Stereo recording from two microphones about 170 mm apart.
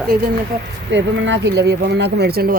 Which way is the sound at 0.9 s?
90° right.